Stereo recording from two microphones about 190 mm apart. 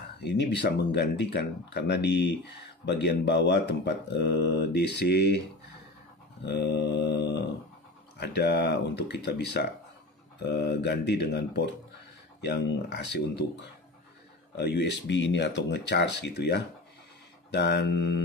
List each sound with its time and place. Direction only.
0.2 s speech: 60° left (ahead or behind)
6.4 s speech: 65° left (ahead or behind)